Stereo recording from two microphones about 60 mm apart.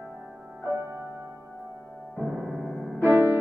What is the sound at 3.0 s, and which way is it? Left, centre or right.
Music, right.